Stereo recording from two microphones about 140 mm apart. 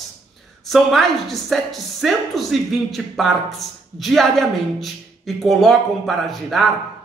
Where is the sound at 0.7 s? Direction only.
Centre (ahead or behind).